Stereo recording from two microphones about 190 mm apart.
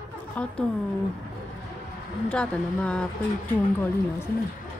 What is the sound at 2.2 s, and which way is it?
Speech, 5° left (ahead or behind).